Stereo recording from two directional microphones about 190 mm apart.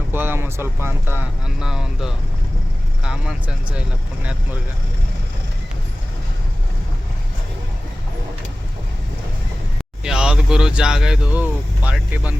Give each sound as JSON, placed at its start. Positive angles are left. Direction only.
{"t": 0.1, "sound": "speech", "side_deg": -10}
{"t": 10.0, "sound": "speech", "side_deg": -5}